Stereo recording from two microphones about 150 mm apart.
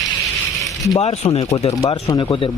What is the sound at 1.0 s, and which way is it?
Speech, 40° left (ahead or behind).